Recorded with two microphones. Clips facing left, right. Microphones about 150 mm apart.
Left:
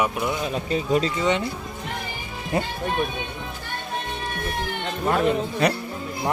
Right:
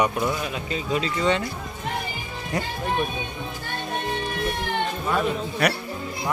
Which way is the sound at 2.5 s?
25° left (ahead or behind).